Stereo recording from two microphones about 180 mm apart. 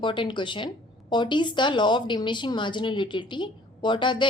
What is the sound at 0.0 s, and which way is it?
A woman's voice, 25° left (ahead or behind).